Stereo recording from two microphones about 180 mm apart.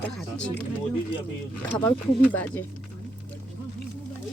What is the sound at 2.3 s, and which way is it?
Speech, 10° left (ahead or behind).